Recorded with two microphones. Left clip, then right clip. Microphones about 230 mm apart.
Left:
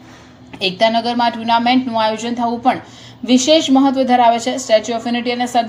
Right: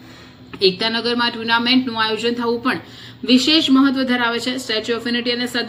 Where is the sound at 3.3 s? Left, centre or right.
Centre.